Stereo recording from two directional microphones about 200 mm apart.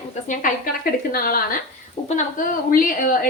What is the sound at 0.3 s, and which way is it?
A woman's voice, 40° left (ahead or behind).